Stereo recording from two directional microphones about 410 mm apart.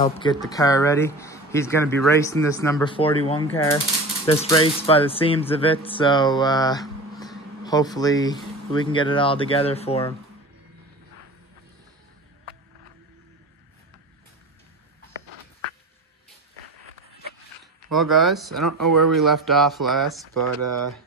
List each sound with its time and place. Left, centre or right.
0.0 s speech: centre
17.9 s speech: centre
18.7 s speech: right
19.2 s speech: centre
20.3 s speech: right